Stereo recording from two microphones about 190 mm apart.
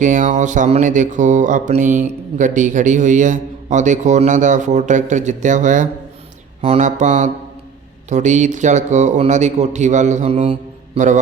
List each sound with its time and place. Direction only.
0.0 s speech: 40° right (ahead or behind)